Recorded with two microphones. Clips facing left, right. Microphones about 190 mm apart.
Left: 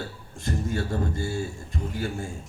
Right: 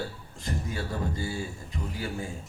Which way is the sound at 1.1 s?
45° left (ahead or behind).